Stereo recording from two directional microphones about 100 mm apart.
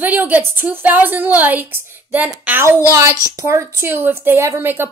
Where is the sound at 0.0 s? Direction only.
15° right (ahead or behind).